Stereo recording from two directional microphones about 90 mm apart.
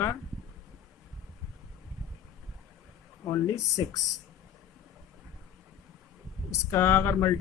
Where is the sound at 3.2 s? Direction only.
35° left (ahead or behind).